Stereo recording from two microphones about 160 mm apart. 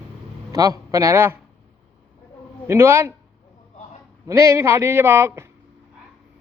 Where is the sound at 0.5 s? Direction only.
20° right (ahead or behind).